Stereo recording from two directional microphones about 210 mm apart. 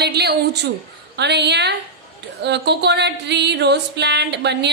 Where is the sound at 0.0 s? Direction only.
50° right (ahead or behind).